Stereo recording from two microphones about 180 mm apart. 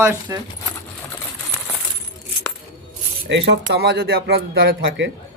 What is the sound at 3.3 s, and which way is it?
A man's voice, 75° right (ahead or behind).